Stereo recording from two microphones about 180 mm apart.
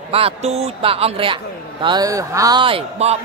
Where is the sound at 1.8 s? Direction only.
20° right (ahead or behind).